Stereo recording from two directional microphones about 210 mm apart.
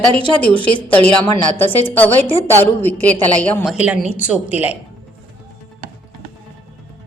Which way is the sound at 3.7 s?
5° right (ahead or behind).